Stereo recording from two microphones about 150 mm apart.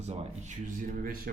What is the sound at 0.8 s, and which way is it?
Speech, 70° right (ahead or behind).